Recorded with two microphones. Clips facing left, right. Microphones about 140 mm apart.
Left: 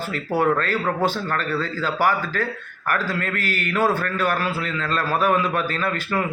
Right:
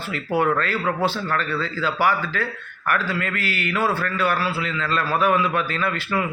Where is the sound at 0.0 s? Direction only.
40° left (ahead or behind).